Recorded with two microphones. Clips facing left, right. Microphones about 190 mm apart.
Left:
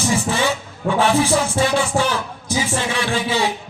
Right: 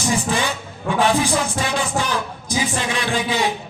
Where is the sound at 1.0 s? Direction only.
15° right (ahead or behind).